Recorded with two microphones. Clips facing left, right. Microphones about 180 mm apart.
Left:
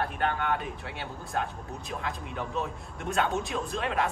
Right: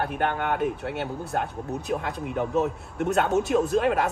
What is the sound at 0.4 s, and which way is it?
Speech, 60° right (ahead or behind).